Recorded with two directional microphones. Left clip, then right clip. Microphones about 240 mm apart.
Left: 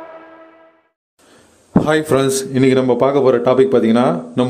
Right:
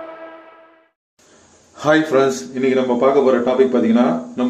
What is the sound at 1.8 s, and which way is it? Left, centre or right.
Speech, left.